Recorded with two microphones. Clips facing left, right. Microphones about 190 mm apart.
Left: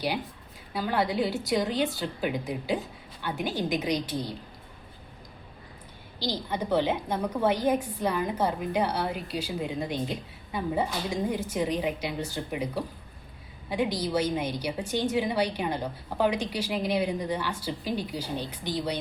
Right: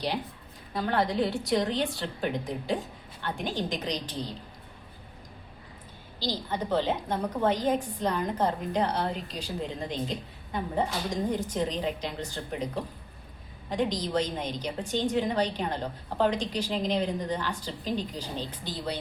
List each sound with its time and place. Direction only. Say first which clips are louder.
0.7 s a woman's voice: even; 5° left (ahead or behind)
6.1 s a woman's voice: left 1 dB; 15° left (ahead or behind)